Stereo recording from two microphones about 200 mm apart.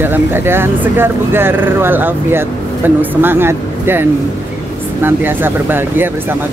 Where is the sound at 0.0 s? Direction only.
10° right (ahead or behind).